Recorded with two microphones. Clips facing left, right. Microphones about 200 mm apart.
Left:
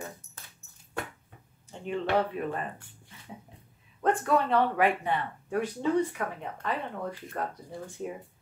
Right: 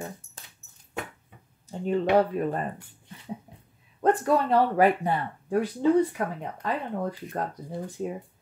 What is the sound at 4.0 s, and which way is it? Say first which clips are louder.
Speech: right 3 dB; 35° right (ahead or behind).